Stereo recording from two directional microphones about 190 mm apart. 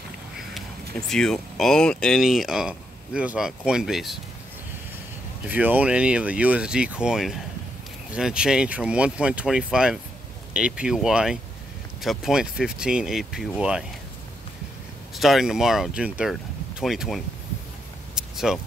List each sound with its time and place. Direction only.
0.6 s speech: 5° left (ahead or behind)
5.5 s speech: 10° right (ahead or behind)
15.1 s speech: centre (ahead or behind)
18.1 s a sound: centre (ahead or behind)